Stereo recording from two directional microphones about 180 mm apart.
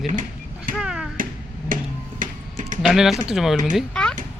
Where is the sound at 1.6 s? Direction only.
50° right (ahead or behind).